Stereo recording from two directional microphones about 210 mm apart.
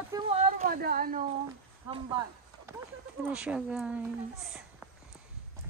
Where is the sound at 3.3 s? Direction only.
5° right (ahead or behind).